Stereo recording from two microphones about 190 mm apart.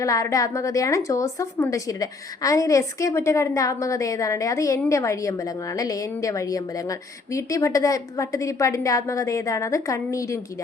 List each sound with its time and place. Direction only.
0.0 s a woman's voice: 15° left (ahead or behind)